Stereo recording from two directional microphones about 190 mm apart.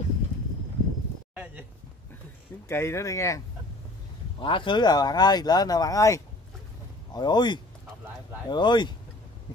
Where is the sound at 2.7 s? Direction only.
15° left (ahead or behind).